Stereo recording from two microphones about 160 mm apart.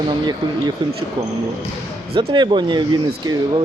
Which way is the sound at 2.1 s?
30° right (ahead or behind).